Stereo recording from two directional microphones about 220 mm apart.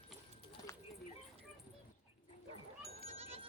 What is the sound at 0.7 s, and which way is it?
Clip-clop, 15° left (ahead or behind).